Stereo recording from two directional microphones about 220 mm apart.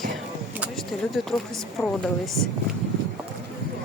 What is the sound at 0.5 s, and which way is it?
Speech, centre (ahead or behind).